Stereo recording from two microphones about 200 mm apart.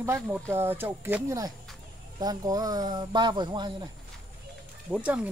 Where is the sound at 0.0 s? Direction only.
15° right (ahead or behind).